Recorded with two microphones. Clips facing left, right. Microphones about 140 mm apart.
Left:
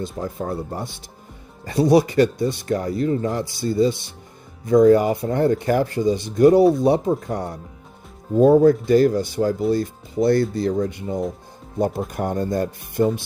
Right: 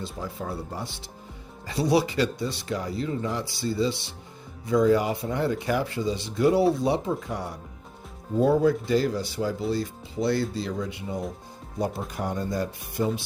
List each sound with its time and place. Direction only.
0.0 s speech: 50° left (ahead or behind)